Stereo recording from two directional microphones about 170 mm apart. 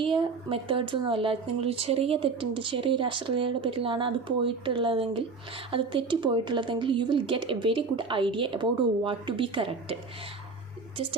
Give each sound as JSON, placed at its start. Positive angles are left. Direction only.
{"t": 0.0, "sound": "a woman's voice", "side_deg": -30}